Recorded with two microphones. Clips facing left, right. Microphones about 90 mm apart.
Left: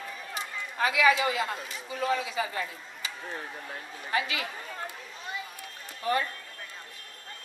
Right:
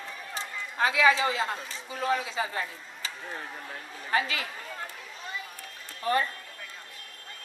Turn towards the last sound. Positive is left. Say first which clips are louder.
# right 1 dB
turn(degrees=-35)  # may be behind; listen again after turning